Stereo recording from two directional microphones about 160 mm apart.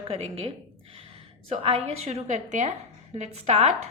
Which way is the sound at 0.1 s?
40° right (ahead or behind).